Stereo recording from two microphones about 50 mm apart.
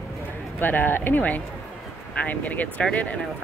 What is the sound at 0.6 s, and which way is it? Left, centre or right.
Speech, left.